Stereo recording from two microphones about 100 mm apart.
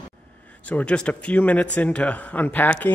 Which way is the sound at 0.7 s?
10° left (ahead or behind).